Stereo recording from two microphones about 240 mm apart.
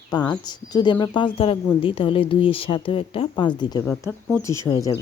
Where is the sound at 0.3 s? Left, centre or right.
Centre.